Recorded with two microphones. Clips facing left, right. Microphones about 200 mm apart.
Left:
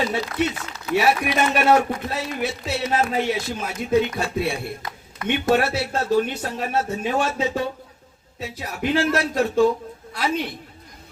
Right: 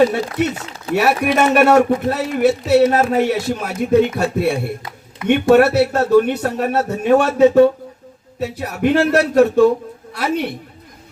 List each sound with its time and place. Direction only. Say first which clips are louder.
0.0 s speech: right 8 dB; 45° right (ahead or behind)
0.9 s speech: right 3 dB; 30° right (ahead or behind)
1.2 s speech: right 7 dB; 60° right (ahead or behind)